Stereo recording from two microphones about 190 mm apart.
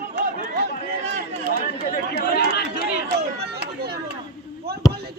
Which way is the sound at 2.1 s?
55° left (ahead or behind).